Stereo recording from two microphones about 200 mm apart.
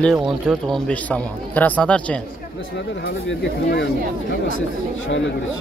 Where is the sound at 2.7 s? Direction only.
60° left (ahead or behind).